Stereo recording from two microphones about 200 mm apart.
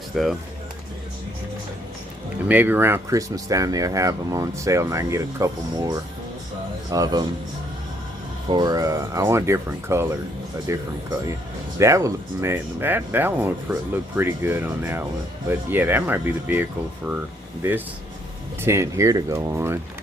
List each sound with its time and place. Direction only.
0.1 s speech: centre (ahead or behind)
2.5 s speech: 10° right (ahead or behind)
8.4 s speech: 20° right (ahead or behind)
11.8 s speech: 15° right (ahead or behind)